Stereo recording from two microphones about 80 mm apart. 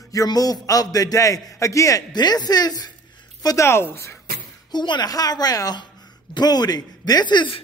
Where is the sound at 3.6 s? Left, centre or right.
Left.